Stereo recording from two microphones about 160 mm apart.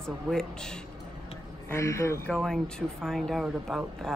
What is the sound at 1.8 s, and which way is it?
Speech, 20° left (ahead or behind).